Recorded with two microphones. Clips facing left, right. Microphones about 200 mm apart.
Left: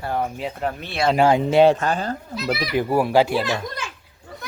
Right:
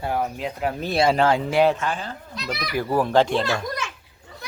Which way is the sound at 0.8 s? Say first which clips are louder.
Right 6 dB; 40° right (ahead or behind).